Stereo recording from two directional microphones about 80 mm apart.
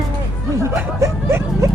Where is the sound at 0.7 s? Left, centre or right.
Right.